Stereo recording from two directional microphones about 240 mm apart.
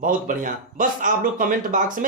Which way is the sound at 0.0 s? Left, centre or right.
Right.